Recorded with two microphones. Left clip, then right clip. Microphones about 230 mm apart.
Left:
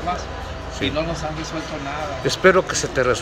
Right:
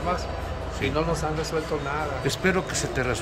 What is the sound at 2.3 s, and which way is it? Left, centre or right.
Speech, centre.